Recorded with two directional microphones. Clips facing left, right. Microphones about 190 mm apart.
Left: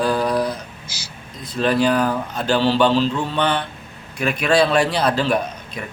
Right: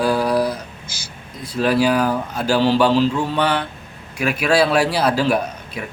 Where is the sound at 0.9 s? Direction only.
50° right (ahead or behind).